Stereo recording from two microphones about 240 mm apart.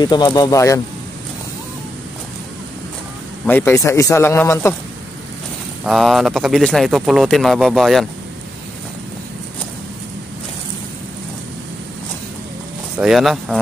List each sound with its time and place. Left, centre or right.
0.0 s a man's voice: centre
3.4 s a man's voice: centre
5.9 s speech: centre
13.0 s speech: centre